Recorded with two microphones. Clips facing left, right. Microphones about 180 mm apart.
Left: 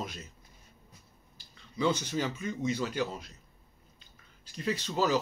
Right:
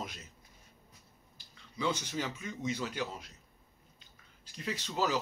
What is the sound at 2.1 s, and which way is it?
Speech, 15° right (ahead or behind).